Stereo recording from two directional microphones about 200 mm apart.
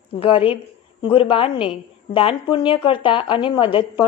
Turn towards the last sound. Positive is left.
turn(degrees=25)  # may be behind; listen again after turning